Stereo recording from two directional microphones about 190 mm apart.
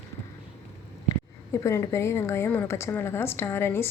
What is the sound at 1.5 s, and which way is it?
A woman's voice, 15° left (ahead or behind).